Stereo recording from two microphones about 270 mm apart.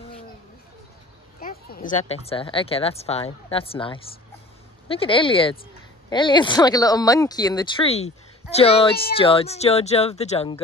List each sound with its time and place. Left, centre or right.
1.4 s speech: left